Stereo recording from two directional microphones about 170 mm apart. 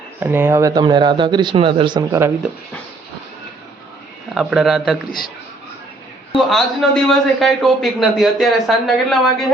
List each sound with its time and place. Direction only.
0.2 s speech: 10° right (ahead or behind)
4.4 s a man's voice: 5° right (ahead or behind)
6.3 s a man's voice: centre (ahead or behind)